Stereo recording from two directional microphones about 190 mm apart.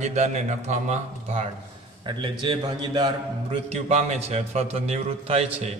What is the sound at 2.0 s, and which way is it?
A man's voice, 25° right (ahead or behind).